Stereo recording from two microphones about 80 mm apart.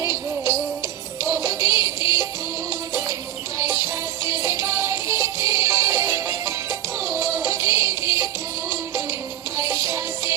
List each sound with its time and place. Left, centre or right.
0.0 s music: right
3.6 s music: right